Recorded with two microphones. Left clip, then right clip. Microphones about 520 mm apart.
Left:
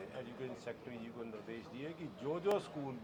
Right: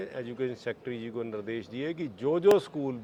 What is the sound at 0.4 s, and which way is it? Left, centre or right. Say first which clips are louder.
Speech: right 12 dB; right.